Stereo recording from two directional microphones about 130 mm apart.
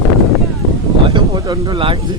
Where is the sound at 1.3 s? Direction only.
25° right (ahead or behind).